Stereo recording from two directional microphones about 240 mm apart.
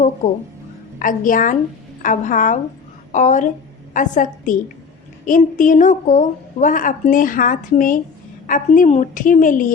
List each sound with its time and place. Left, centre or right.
0.9 s a woman's voice: left